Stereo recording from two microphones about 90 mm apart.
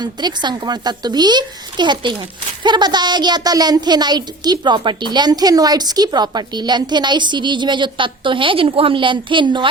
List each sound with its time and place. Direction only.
0.0 s a woman's voice: 50° right (ahead or behind)